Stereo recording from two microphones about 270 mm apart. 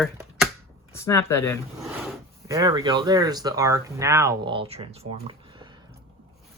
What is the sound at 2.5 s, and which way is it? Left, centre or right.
Speech, centre.